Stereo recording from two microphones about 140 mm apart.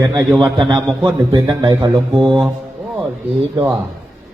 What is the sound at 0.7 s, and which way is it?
A man's voice, 30° right (ahead or behind).